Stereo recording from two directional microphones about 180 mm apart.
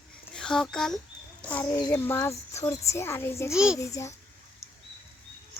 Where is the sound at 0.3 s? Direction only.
5° left (ahead or behind).